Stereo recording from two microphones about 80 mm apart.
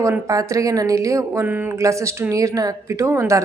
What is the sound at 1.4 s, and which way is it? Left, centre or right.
Speech, right.